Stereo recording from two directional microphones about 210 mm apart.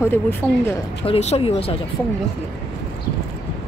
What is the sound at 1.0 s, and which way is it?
Speech, 30° left (ahead or behind).